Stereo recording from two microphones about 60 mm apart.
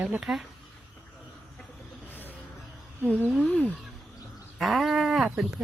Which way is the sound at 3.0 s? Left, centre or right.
Centre.